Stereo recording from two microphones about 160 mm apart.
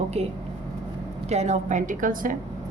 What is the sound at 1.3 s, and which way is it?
A woman's voice, 45° right (ahead or behind).